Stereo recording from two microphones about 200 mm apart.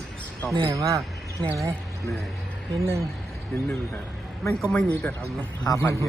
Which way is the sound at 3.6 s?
Centre (ahead or behind).